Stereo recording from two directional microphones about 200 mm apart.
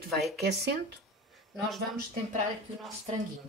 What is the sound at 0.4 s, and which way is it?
Speech, 55° right (ahead or behind).